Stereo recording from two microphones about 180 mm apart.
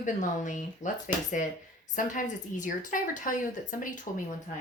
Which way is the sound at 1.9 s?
45° left (ahead or behind).